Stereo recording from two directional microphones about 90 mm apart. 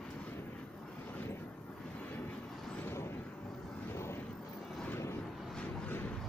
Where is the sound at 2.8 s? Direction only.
25° left (ahead or behind).